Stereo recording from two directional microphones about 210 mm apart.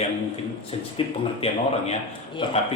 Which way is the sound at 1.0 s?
25° left (ahead or behind).